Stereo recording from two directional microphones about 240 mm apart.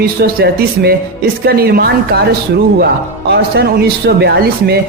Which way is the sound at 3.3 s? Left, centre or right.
Right.